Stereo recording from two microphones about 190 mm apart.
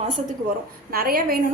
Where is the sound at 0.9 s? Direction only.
50° right (ahead or behind).